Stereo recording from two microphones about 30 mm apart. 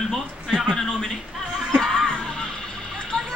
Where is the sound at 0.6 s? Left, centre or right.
Centre.